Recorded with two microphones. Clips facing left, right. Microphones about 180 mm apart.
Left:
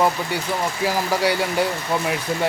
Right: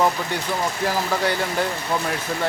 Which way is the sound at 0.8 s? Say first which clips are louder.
Left 3 dB; 10° left (ahead or behind).